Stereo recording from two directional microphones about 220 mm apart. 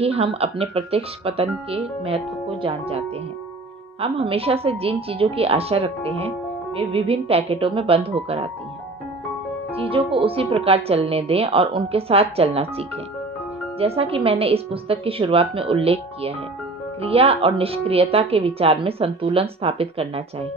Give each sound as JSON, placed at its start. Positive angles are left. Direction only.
{"t": 0.0, "sound": "a woman's voice", "side_deg": -25}
{"t": 4.0, "sound": "a woman's voice", "side_deg": -25}
{"t": 9.8, "sound": "a woman's voice", "side_deg": -25}